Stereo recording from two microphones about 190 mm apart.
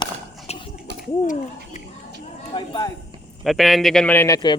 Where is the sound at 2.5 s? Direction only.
20° left (ahead or behind).